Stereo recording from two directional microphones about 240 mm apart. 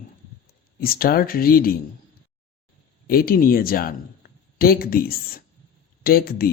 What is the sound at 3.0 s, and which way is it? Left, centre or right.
Speech, left.